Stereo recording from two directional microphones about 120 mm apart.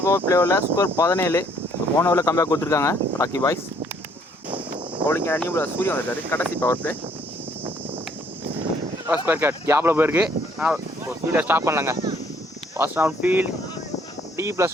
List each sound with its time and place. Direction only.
0.3 s speech: 20° left (ahead or behind)
5.0 s speech: 20° left (ahead or behind)
9.0 s speech: 15° right (ahead or behind)